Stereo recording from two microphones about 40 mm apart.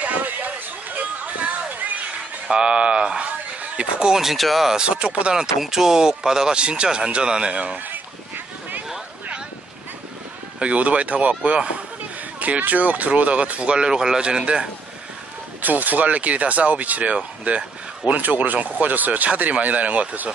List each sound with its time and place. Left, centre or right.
0.0 s a sound: right
2.4 s speech: centre
3.3 s a sound: right
4.1 s speech: centre
4.8 s speech: right
5.3 s speech: centre
10.6 s speech: right
12.4 s speech: right
13.7 s speech: centre
15.6 s speech: right